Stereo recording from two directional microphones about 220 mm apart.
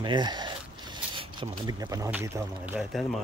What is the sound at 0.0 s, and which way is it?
Zipper, 20° right (ahead or behind).